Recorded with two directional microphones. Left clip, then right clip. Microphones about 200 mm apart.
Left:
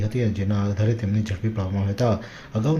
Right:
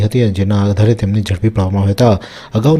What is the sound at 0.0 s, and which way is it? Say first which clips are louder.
Speech: right 11 dB; 40° right (ahead or behind).